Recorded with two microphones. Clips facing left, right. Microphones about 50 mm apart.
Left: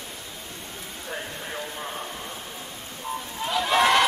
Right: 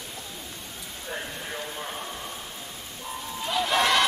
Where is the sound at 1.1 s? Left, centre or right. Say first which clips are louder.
Left 1 dB; centre.